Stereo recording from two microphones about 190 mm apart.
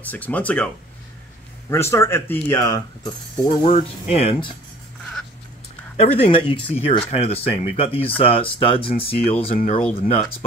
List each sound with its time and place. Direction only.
0.1 s speech: 10° left (ahead or behind)
1.7 s speech: 15° left (ahead or behind)
3.4 s speech: 30° left (ahead or behind)
5.9 s speech: 30° left (ahead or behind)